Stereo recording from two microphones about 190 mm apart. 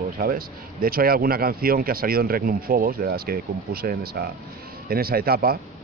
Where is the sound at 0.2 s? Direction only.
50° right (ahead or behind).